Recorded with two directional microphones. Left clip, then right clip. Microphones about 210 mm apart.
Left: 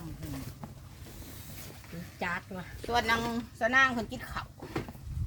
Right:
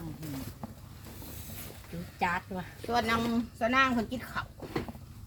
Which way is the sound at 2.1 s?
15° right (ahead or behind).